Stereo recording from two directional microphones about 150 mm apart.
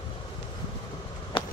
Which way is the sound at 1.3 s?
35° left (ahead or behind).